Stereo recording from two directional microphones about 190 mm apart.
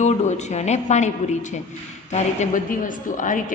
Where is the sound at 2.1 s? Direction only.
40° left (ahead or behind).